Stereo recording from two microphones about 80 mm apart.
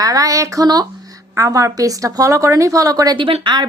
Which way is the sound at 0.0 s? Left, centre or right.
Right.